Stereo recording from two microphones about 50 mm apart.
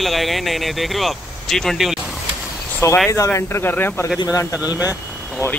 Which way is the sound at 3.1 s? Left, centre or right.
Left.